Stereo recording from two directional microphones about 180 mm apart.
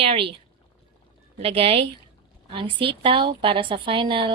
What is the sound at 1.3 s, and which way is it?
A woman's voice, 30° right (ahead or behind).